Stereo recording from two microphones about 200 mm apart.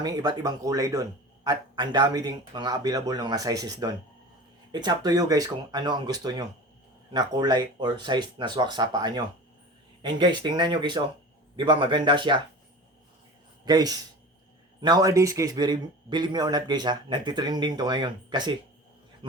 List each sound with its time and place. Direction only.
0.0 s speech: 20° right (ahead or behind)
13.7 s speech: 20° right (ahead or behind)